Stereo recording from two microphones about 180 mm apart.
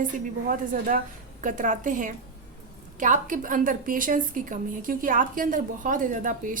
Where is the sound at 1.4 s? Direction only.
45° right (ahead or behind).